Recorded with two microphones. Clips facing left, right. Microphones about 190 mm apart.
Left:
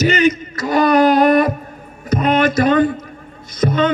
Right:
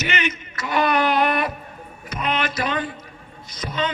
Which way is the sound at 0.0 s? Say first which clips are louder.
Left 12 dB; 40° left (ahead or behind).